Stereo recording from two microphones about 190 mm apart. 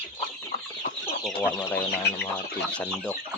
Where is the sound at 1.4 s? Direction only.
10° left (ahead or behind).